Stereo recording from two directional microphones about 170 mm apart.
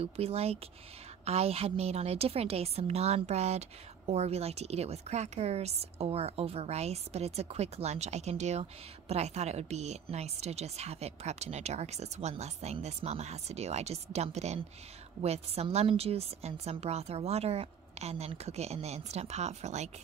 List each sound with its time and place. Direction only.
0.0 s a woman's voice: 35° right (ahead or behind)